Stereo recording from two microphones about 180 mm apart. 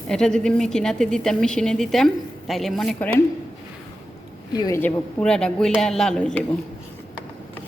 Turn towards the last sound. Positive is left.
turn(degrees=5)  # may be behind; listen again after turning